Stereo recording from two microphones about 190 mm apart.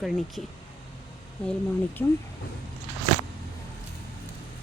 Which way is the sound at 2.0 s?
15° left (ahead or behind).